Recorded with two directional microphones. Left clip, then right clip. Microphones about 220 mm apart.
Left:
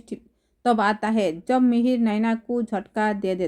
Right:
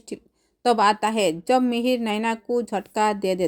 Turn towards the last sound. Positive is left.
turn(degrees=-30)  # may be behind; listen again after turning